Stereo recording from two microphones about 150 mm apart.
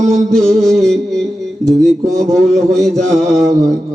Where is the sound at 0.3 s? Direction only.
5° left (ahead or behind).